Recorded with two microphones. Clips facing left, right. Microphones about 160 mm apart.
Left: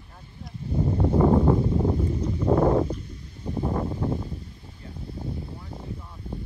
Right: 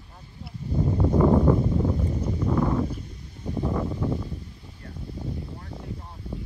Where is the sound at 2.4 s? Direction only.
35° left (ahead or behind).